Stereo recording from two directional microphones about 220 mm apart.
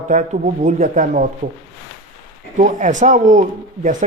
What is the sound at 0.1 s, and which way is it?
Speech, 35° right (ahead or behind).